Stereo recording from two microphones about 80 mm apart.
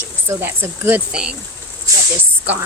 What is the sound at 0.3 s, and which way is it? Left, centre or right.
Speech, right.